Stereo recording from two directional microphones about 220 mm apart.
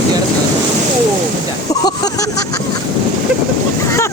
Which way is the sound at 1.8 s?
15° left (ahead or behind).